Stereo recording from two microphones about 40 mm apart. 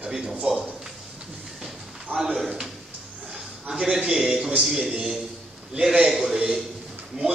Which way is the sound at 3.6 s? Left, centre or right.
Right.